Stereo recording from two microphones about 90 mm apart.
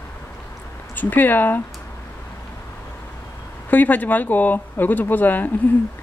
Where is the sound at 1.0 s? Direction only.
20° left (ahead or behind).